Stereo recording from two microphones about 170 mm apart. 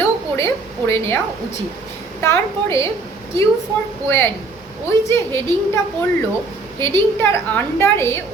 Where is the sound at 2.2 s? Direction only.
15° left (ahead or behind).